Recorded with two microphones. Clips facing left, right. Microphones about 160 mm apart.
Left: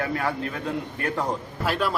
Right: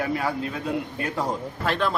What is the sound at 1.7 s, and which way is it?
Speech, 5° left (ahead or behind).